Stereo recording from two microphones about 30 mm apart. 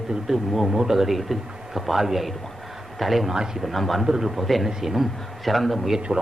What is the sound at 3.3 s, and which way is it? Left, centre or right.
Speech, centre.